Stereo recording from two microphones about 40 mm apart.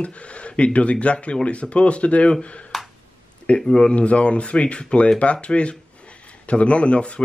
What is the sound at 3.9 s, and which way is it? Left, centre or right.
Speech, left.